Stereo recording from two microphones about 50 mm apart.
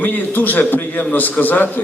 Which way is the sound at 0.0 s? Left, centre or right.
Left.